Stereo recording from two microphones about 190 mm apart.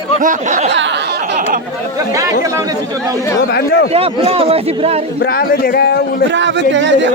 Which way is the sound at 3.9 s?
30° right (ahead or behind).